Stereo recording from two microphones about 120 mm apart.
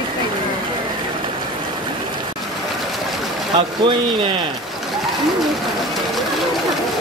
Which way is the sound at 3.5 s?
45° right (ahead or behind).